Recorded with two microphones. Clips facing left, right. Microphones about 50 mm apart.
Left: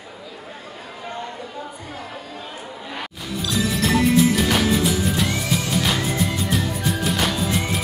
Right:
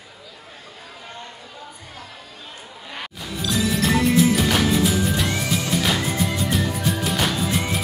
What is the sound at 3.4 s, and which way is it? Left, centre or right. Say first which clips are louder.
Music: right 1 dB; centre.